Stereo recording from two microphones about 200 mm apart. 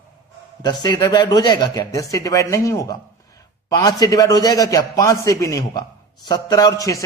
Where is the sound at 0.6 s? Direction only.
20° left (ahead or behind).